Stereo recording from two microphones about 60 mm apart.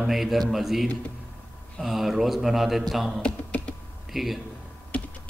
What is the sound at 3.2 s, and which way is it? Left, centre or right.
Computer keyboard, centre.